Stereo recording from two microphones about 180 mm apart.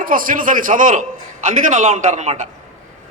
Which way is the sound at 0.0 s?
50° right (ahead or behind).